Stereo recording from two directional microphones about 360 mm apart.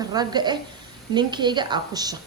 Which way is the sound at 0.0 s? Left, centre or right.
Centre.